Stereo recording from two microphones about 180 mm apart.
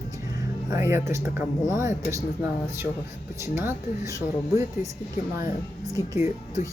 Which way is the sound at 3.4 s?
15° right (ahead or behind).